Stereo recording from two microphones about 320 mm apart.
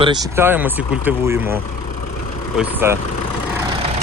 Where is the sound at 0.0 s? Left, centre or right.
Centre.